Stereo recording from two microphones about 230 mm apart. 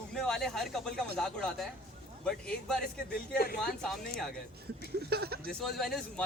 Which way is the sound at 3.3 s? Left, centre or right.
Left.